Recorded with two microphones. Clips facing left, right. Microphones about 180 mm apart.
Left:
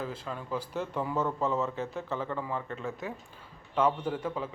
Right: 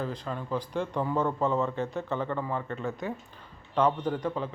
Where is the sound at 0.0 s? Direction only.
5° left (ahead or behind).